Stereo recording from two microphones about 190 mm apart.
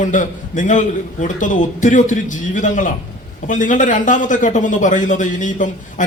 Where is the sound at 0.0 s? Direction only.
40° left (ahead or behind).